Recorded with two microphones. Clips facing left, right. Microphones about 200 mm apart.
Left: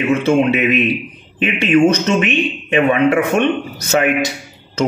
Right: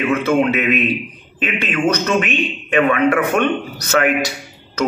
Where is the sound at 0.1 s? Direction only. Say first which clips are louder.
Left 3 dB; 25° left (ahead or behind).